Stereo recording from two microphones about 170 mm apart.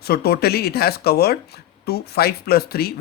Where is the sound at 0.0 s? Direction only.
65° left (ahead or behind).